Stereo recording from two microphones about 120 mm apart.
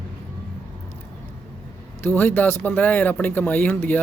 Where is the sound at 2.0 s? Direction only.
15° left (ahead or behind).